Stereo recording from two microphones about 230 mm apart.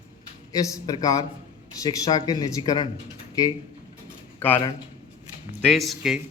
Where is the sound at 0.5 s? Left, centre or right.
Centre.